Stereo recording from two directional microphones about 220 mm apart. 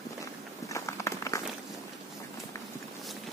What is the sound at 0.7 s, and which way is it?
Walk, 15° left (ahead or behind).